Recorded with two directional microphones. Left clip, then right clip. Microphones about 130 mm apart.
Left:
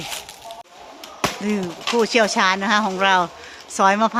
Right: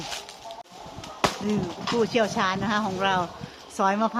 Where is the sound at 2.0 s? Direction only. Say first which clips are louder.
Left 7 dB; 35° left (ahead or behind).